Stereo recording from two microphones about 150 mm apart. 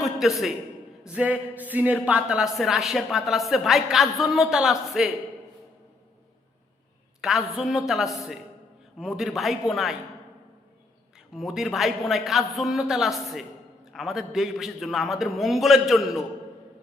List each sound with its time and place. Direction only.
0.0 s a sound: centre (ahead or behind)
1.0 s speech: 10° right (ahead or behind)
7.2 s speech: centre (ahead or behind)
11.3 s speech: centre (ahead or behind)